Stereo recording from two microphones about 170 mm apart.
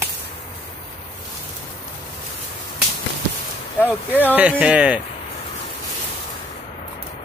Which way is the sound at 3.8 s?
10° left (ahead or behind).